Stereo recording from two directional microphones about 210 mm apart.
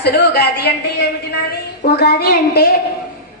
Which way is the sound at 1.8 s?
50° left (ahead or behind).